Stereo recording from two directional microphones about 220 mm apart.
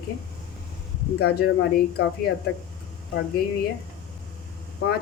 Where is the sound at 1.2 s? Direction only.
45° left (ahead or behind).